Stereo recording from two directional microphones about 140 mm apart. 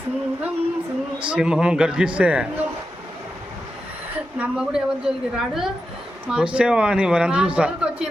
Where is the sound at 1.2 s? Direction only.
10° right (ahead or behind).